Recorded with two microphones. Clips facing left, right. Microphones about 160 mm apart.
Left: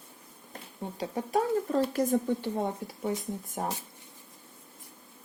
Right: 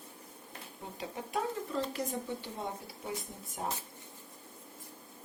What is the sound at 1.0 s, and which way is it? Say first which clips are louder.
Speech: left 7 dB; 40° left (ahead or behind).